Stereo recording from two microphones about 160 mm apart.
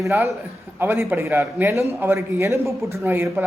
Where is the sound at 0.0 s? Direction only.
20° right (ahead or behind).